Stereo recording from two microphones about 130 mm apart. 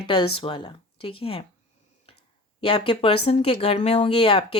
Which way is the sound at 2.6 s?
45° left (ahead or behind).